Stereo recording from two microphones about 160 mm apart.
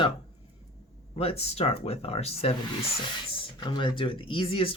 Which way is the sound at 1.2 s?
40° left (ahead or behind).